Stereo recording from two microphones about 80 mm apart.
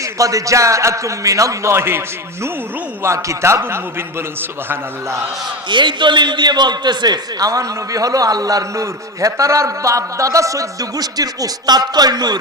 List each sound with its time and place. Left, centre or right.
0.0 s a man's voice: right
5.6 s a man's voice: right